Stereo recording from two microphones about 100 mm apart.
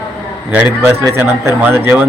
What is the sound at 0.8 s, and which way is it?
A man's voice, 25° right (ahead or behind).